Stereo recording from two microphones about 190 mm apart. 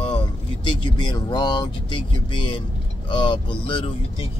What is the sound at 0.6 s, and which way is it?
Speech, 25° left (ahead or behind).